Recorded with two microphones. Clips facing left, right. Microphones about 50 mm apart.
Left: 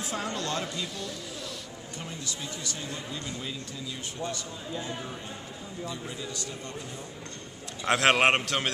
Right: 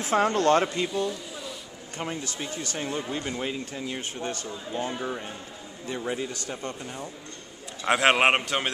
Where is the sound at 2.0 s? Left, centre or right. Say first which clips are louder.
Right 7 dB; right.